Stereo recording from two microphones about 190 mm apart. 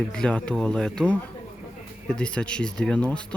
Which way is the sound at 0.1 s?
5° left (ahead or behind).